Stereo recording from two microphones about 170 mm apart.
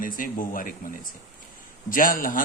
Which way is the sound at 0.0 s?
55° left (ahead or behind).